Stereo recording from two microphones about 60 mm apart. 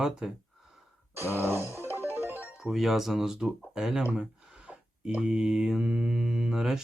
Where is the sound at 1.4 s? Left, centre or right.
Right.